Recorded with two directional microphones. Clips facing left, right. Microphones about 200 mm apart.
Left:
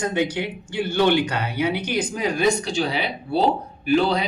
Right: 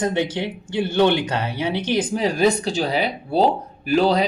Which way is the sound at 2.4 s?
35° right (ahead or behind).